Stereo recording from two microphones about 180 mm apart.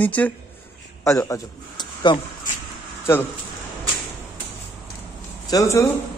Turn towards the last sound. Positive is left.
turn(degrees=15)  # may be behind; listen again after turning